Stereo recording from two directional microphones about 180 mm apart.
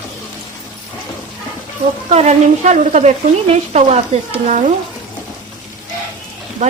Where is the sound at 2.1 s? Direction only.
40° right (ahead or behind).